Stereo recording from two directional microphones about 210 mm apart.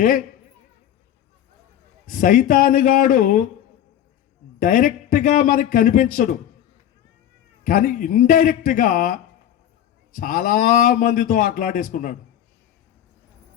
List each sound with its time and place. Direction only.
2.0 s a man's voice: 40° left (ahead or behind)
4.6 s a man's voice: 40° left (ahead or behind)
7.6 s a man's voice: 40° left (ahead or behind)